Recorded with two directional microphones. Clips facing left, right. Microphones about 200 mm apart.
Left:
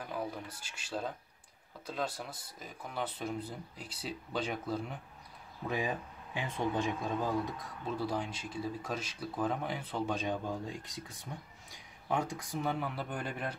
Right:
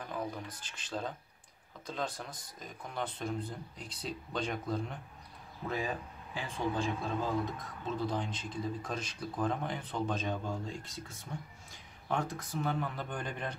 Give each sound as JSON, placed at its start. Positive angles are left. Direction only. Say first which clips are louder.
{"t": 0.0, "sound": "speech", "louder": "even", "side_deg": 5}
{"t": 5.7, "sound": "speech", "louder": "left 1 dB", "side_deg": 15}